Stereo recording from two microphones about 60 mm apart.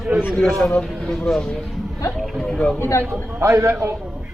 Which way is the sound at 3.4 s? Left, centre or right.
Right.